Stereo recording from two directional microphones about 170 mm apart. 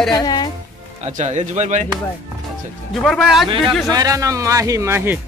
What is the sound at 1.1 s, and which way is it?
Speech, 45° right (ahead or behind).